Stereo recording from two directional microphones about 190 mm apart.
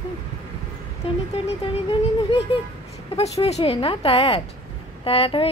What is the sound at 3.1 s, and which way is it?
Speech, 30° left (ahead or behind).